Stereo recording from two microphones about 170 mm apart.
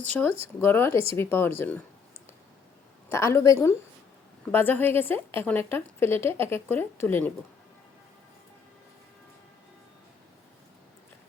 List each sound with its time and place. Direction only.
0.6 s a woman's voice: 10° left (ahead or behind)
3.1 s a woman's voice: 15° left (ahead or behind)